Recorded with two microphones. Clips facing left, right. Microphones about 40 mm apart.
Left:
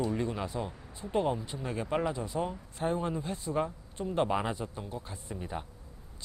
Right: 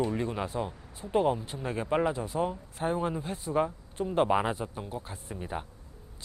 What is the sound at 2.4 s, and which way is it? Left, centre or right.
Speech, centre.